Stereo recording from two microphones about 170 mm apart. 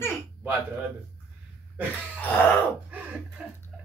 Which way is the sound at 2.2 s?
10° left (ahead or behind).